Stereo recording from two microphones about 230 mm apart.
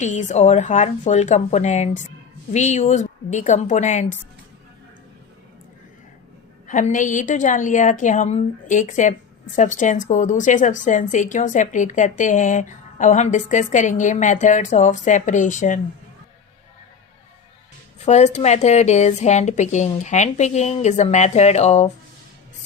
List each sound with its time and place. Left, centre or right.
0.0 s a woman's voice: left
6.7 s a woman's voice: left
18.0 s a woman's voice: left